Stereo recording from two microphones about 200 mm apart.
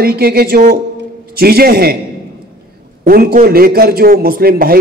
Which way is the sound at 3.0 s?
45° right (ahead or behind).